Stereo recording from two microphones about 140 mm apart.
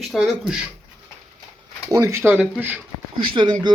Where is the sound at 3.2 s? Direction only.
35° right (ahead or behind).